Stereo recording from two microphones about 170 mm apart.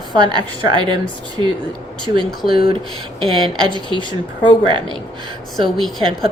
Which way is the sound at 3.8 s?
25° right (ahead or behind).